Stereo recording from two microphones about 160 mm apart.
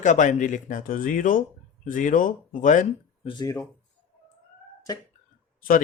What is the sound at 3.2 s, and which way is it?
Speech, 25° left (ahead or behind).